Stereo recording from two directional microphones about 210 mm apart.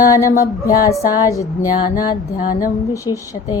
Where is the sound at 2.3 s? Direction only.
40° left (ahead or behind).